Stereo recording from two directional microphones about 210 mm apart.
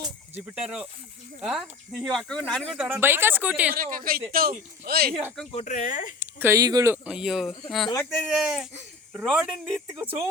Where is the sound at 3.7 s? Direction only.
45° right (ahead or behind).